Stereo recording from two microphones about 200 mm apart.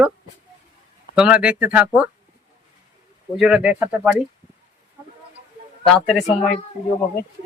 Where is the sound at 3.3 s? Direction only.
5° right (ahead or behind).